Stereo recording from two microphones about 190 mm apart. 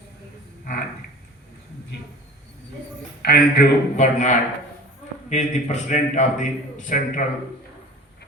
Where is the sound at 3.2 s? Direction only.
60° left (ahead or behind).